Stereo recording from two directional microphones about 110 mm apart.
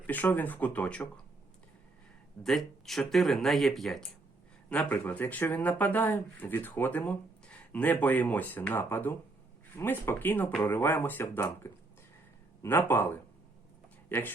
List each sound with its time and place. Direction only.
0.1 s speech: 15° left (ahead or behind)
2.4 s speech: centre (ahead or behind)
4.7 s speech: 15° left (ahead or behind)